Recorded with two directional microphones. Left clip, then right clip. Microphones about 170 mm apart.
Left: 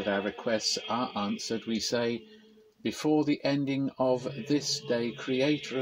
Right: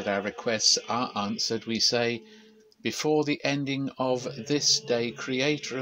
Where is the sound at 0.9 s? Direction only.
30° right (ahead or behind).